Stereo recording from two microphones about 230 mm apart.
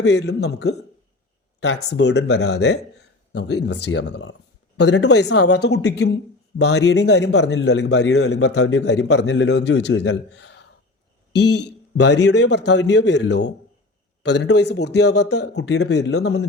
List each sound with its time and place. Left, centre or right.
0.0 s a man's voice: left